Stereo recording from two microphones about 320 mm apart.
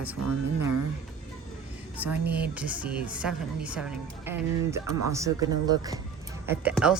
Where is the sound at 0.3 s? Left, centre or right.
Right.